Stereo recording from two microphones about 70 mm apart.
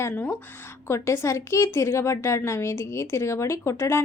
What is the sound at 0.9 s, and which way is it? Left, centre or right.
A woman's voice, left.